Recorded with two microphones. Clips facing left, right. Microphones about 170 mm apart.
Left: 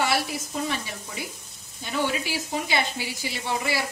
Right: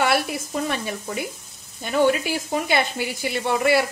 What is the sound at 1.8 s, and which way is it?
Speech, 55° right (ahead or behind).